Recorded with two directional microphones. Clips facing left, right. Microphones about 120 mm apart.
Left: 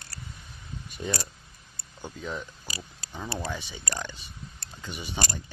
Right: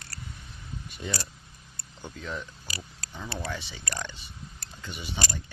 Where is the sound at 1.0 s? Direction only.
15° left (ahead or behind).